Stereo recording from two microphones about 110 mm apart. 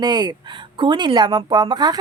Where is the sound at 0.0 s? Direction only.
35° right (ahead or behind).